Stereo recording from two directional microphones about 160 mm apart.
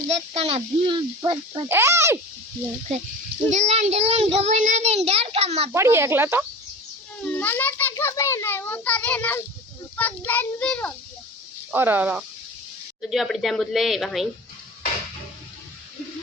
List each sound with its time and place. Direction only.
0.3 s a child's voice: 40° right (ahead or behind)
1.6 s speech: 15° right (ahead or behind)
3.5 s a child's voice: 45° right (ahead or behind)
5.7 s speech: 15° right (ahead or behind)
7.3 s a child's voice: 10° left (ahead or behind)
11.7 s speech: 10° right (ahead or behind)
13.0 s a woman's voice: centre (ahead or behind)